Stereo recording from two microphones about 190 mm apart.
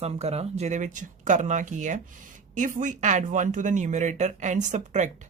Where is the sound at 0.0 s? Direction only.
35° right (ahead or behind).